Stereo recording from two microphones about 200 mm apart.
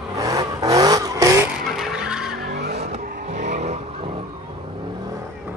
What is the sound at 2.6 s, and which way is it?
Vehicle, 55° right (ahead or behind).